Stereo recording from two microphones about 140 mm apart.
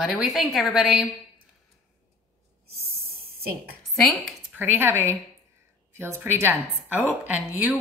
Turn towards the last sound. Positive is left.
turn(degrees=-10)  # may be behind; listen again after turning